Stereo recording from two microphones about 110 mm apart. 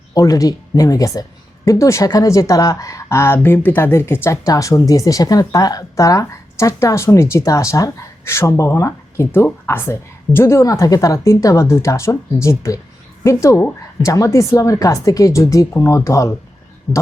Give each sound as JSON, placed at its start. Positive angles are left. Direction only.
{"t": 0.1, "sound": "speech", "side_deg": 35}